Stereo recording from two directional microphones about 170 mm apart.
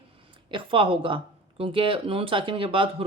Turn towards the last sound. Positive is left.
turn(degrees=-30)  # may be behind; listen again after turning